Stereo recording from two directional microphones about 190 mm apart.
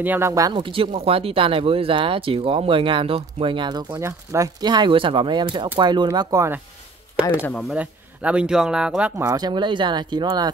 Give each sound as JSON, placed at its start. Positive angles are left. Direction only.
{"t": 0.0, "sound": "speech", "side_deg": -10}
{"t": 7.4, "sound": "speech", "side_deg": 5}
{"t": 7.7, "sound": "speech", "side_deg": -5}
{"t": 9.2, "sound": "speech", "side_deg": -20}